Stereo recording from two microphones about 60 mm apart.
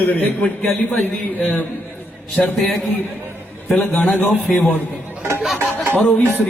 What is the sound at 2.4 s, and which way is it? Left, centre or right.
Speech, centre.